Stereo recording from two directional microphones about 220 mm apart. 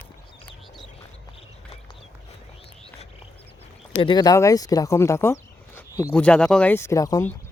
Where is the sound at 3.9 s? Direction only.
25° left (ahead or behind).